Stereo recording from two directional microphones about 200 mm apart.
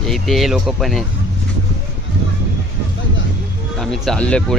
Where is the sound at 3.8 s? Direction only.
Centre (ahead or behind).